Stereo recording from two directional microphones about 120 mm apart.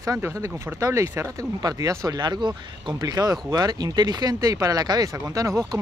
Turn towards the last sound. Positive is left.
turn(degrees=-25)  # may be behind; listen again after turning